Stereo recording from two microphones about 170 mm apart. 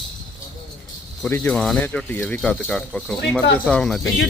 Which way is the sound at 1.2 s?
10° left (ahead or behind).